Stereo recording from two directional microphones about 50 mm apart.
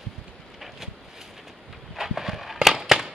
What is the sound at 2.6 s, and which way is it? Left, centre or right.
Fireworks, centre.